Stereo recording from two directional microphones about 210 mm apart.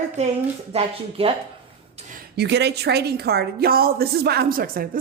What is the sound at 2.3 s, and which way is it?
Speech, 55° right (ahead or behind).